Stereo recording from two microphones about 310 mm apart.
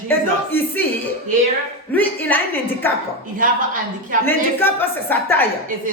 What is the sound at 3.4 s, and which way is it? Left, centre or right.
Speech, right.